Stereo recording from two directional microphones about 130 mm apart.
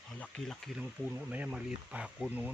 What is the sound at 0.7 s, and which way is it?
Speech, 15° right (ahead or behind).